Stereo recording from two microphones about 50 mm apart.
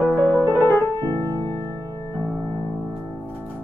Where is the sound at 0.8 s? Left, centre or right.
Left.